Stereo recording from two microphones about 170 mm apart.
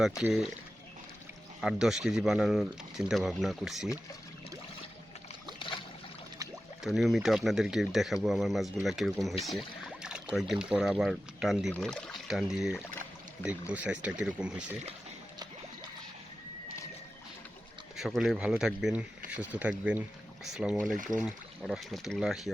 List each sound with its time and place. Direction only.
0.2 s speech: 5° right (ahead or behind)
1.6 s speech: centre (ahead or behind)
5.5 s boat: 30° left (ahead or behind)
6.8 s speech: centre (ahead or behind)
9.4 s pour: centre (ahead or behind)
10.3 s speech: centre (ahead or behind)
17.9 s speech: centre (ahead or behind)
20.9 s speech: 50° right (ahead or behind)
21.2 s speech: 5° right (ahead or behind)